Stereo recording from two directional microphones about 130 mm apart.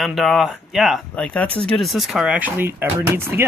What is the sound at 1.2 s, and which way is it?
Speech, 10° left (ahead or behind).